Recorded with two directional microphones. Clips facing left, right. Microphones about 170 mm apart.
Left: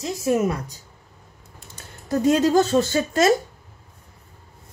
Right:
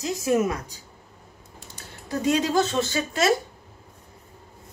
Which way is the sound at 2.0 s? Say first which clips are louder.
Left 5 dB; 45° left (ahead or behind).